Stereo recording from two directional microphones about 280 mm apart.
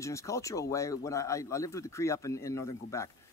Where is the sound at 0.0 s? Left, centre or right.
Centre.